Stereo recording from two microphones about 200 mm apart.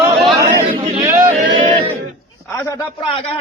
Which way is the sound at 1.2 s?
40° right (ahead or behind).